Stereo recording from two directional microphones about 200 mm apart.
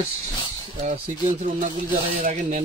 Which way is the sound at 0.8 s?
35° right (ahead or behind).